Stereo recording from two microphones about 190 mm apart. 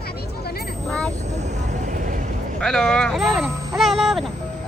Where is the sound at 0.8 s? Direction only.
5° left (ahead or behind).